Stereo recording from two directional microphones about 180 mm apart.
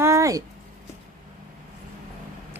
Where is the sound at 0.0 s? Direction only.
15° right (ahead or behind).